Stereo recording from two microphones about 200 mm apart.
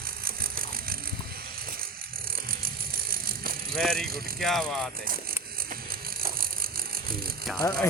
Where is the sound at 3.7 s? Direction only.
Centre (ahead or behind).